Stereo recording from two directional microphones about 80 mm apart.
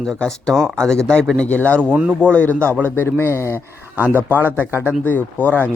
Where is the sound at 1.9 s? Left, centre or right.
Centre.